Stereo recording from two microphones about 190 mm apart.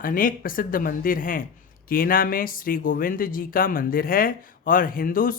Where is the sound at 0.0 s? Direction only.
45° left (ahead or behind).